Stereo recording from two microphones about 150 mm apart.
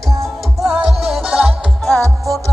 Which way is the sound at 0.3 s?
Centre (ahead or behind).